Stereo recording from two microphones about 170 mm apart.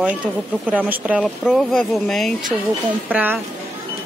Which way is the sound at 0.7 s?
10° right (ahead or behind).